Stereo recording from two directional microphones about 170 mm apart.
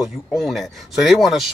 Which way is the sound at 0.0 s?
Centre (ahead or behind).